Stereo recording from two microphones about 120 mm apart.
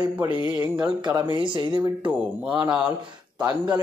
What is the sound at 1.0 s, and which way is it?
Speech, 40° right (ahead or behind).